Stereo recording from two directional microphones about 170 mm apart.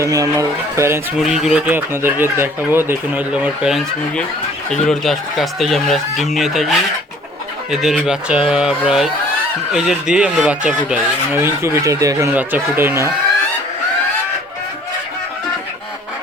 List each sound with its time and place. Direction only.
0.0 s speech: 20° right (ahead or behind)
1.2 s speech: centre (ahead or behind)